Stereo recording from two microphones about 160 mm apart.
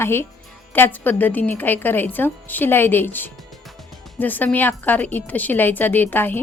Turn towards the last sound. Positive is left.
turn(degrees=10)  # may be behind; listen again after turning